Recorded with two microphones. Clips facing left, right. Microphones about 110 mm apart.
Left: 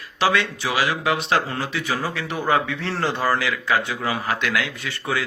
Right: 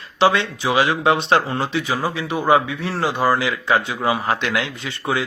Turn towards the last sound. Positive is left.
turn(degrees=-20)  # may be behind; listen again after turning